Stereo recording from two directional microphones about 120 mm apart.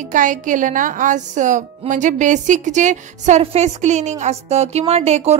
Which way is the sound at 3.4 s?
65° right (ahead or behind).